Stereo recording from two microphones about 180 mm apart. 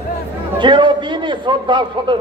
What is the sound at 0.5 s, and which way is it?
A man's voice, 25° right (ahead or behind).